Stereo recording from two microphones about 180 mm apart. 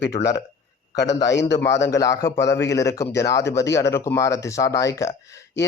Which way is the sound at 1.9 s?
20° left (ahead or behind).